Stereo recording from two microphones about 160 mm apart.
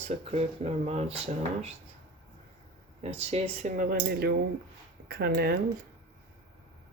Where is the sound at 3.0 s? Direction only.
40° right (ahead or behind); by 5.6 s 80° right.